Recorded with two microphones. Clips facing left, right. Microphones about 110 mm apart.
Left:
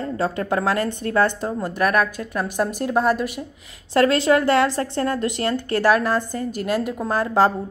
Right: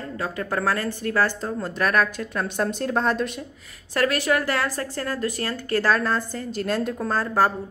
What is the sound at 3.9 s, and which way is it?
A woman's voice, 25° left (ahead or behind).